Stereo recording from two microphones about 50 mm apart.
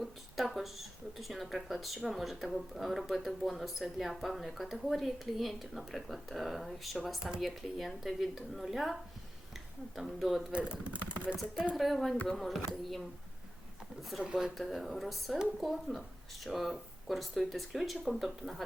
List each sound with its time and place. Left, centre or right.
0.0 s speech: centre
10.5 s speech: right
11.7 s speech: centre
14.3 s speech: centre